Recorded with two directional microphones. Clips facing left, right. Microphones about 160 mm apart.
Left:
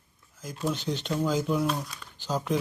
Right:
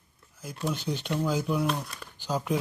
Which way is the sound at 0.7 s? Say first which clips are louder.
Even; 10° right (ahead or behind).